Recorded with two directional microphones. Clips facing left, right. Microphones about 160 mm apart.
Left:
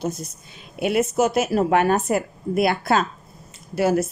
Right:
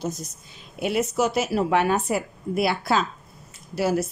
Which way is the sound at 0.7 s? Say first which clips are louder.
Left 3 dB; 55° left (ahead or behind).